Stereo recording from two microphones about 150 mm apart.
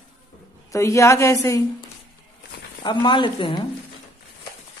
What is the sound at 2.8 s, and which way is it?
Speech, 30° left (ahead or behind).